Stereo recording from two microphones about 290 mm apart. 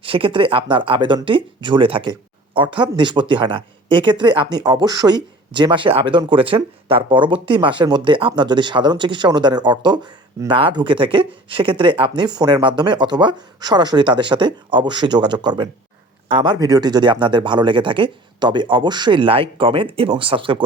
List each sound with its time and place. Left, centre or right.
0.0 s speech: centre